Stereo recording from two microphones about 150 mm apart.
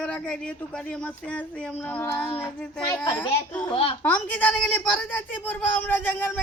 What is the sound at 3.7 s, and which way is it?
Speech, 35° left (ahead or behind).